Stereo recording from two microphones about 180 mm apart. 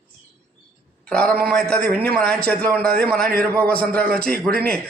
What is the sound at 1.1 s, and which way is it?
A man's voice, 5° left (ahead or behind).